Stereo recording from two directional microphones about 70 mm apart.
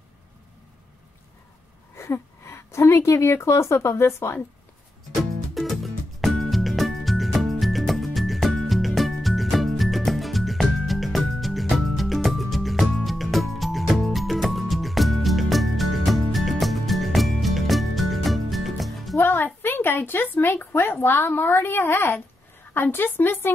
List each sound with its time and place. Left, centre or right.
2.0 s a woman's voice: left
5.5 s music: centre
19.2 s a woman's voice: left